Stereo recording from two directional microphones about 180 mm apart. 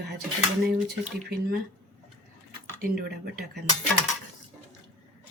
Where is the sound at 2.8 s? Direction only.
55° right (ahead or behind).